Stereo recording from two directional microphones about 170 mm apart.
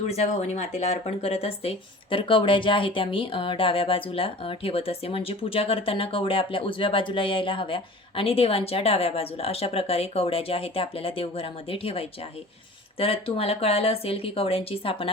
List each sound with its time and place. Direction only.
0.0 s speech: 40° left (ahead or behind)